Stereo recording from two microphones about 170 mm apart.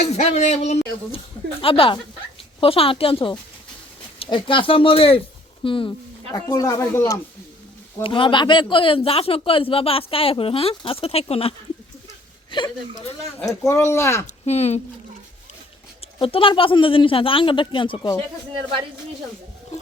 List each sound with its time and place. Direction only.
0.0 s speech: 40° left (ahead or behind)
6.3 s speech: 20° left (ahead or behind)
8.0 s speech: 30° left (ahead or behind)
14.3 s speech: 40° left (ahead or behind)
16.2 s speech: 30° left (ahead or behind)